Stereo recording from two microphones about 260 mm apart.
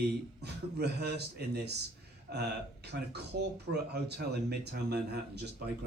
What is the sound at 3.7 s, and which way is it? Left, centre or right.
A man's voice, right.